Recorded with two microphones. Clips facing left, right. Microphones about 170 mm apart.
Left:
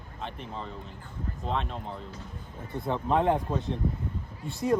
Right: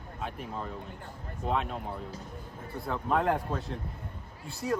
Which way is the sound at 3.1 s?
Centre (ahead or behind).